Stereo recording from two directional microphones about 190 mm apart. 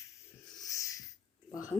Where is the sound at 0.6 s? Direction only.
15° left (ahead or behind).